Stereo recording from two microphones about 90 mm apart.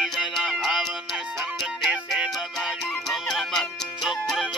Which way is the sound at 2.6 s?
Centre (ahead or behind).